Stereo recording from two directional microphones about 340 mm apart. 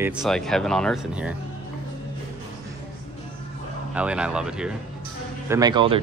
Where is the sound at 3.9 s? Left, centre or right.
Centre.